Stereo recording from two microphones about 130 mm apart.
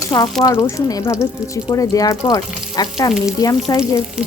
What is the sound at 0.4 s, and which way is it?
Frying, 30° left (ahead or behind).